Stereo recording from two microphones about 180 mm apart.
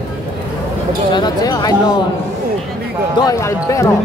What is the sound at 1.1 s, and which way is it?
Speech, 25° left (ahead or behind).